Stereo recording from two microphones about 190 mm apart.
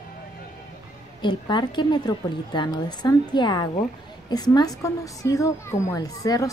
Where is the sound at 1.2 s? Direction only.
25° left (ahead or behind).